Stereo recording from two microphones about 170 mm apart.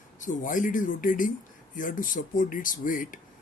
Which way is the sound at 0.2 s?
50° left (ahead or behind).